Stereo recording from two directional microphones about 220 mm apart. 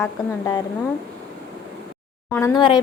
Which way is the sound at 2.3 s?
15° left (ahead or behind).